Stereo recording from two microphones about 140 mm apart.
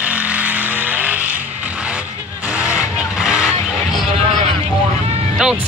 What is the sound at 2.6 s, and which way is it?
Music, 5° right (ahead or behind).